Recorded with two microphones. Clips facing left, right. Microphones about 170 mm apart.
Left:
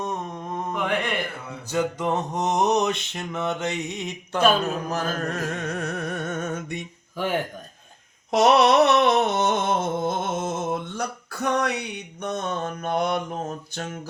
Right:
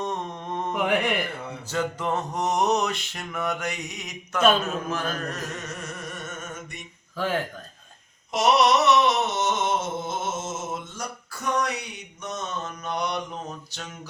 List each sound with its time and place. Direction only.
0.0 s mantra: 5° left (ahead or behind)
0.7 s mantra: 15° right (ahead or behind)
1.6 s mantra: 15° left (ahead or behind)
4.6 s music: 35° left (ahead or behind); by 6.7 s 65° left (ahead or behind)
7.2 s speech: 15° left (ahead or behind)
8.4 s a sound: 60° left (ahead or behind)